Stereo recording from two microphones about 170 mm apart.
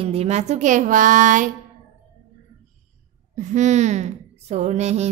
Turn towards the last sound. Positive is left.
turn(degrees=-40)  # may be behind; listen again after turning